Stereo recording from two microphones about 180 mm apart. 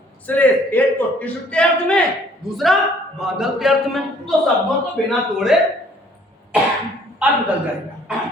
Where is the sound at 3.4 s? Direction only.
Centre (ahead or behind).